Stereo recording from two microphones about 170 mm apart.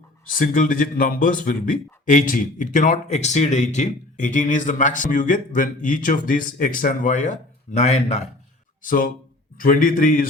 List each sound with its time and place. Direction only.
0.3 s speech: 50° left (ahead or behind)
8.8 s a man's voice: 55° left (ahead or behind)